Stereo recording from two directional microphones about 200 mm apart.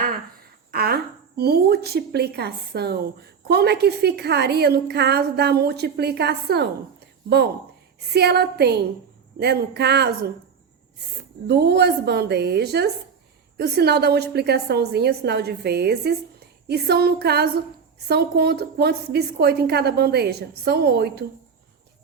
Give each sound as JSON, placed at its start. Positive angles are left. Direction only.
{"t": 0.7, "sound": "a woman's voice", "side_deg": -50}
{"t": 11.4, "sound": "a woman's voice", "side_deg": -55}